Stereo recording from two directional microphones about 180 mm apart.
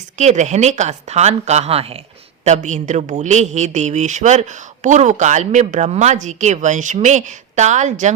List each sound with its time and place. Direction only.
0.2 s speech: 40° right (ahead or behind)